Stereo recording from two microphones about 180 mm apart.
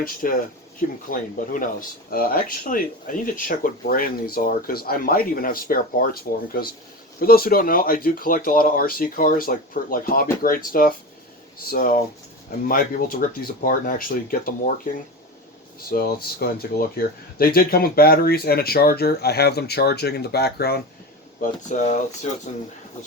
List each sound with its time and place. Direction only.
0.0 s speech: 50° left (ahead or behind)
15.8 s speech: 55° left (ahead or behind)
21.4 s speech: 45° left (ahead or behind)